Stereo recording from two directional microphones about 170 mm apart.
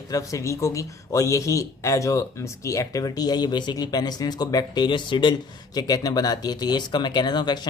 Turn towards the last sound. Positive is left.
turn(degrees=25)  # may be behind; listen again after turning